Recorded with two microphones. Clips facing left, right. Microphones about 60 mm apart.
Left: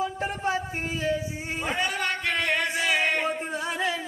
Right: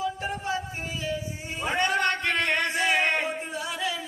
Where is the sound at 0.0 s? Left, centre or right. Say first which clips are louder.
Left 2 dB; left.